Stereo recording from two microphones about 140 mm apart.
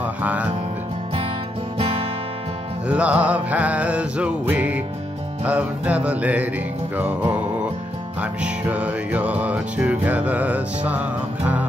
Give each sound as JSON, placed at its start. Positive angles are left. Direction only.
{"t": 0.0, "sound": "music", "side_deg": -10}
{"t": 1.8, "sound": "music", "side_deg": -45}
{"t": 2.9, "sound": "music", "side_deg": -10}